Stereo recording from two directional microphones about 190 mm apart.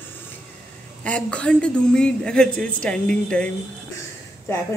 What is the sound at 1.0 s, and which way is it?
A woman's voice, 5° left (ahead or behind).